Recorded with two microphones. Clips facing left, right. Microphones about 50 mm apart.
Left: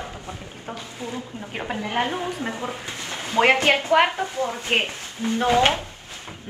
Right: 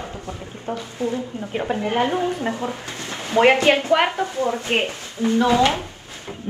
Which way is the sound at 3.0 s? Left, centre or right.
Right.